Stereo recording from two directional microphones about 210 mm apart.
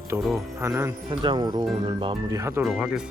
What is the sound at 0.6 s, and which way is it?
Speech, 15° right (ahead or behind).